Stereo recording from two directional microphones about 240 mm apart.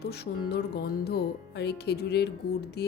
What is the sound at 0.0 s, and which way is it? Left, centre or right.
A woman's voice, left.